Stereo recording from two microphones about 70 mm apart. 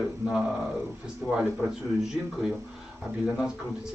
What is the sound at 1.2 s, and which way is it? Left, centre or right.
Speech, right.